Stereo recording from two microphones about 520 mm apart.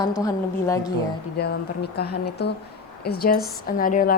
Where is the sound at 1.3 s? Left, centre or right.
Centre.